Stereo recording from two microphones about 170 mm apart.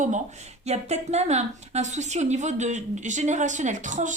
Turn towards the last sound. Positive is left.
turn(degrees=-45)  # may be behind; listen again after turning